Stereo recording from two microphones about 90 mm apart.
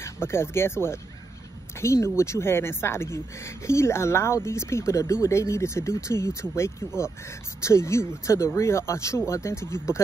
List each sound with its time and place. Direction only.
0.0 s speech: 30° left (ahead or behind)